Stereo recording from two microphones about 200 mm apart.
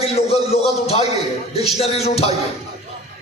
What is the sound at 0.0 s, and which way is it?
A man's voice, 30° left (ahead or behind).